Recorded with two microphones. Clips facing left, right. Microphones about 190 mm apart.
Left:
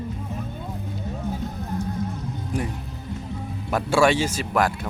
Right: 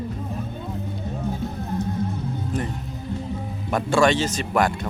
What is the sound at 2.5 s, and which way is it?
Speech, 10° left (ahead or behind).